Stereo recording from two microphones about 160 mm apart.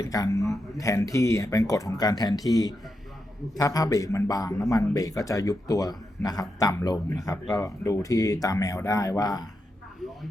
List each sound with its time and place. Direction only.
0.0 s a man's voice: 20° left (ahead or behind)